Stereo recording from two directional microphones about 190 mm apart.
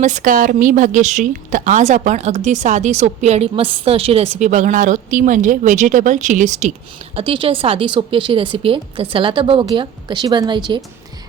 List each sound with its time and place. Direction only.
0.0 s a woman's voice: 40° right (ahead or behind)
7.2 s a woman's voice: 30° right (ahead or behind)